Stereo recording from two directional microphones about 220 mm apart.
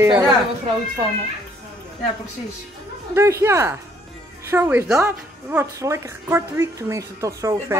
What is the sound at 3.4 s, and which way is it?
Speech, 10° right (ahead or behind).